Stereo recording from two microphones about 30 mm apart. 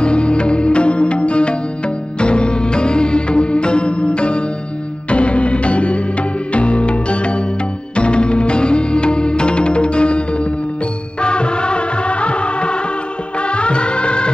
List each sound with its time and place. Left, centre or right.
0.0 s music: left